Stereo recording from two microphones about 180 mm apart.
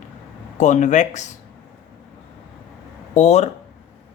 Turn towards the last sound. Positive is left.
turn(degrees=40)  # may be behind; listen again after turning